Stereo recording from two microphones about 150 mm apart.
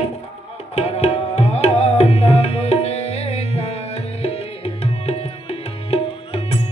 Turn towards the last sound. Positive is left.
turn(degrees=40)  # may be behind; listen again after turning